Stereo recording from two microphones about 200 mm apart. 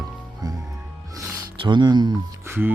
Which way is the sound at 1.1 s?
20° right (ahead or behind).